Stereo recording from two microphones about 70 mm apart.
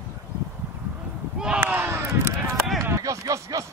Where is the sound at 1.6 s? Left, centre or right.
Right.